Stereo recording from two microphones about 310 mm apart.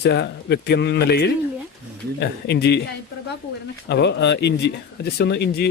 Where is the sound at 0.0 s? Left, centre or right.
Left.